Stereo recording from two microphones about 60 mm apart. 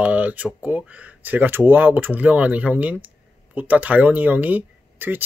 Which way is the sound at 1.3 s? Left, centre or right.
Right.